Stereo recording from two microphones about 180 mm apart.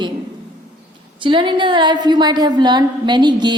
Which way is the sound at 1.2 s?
25° right (ahead or behind).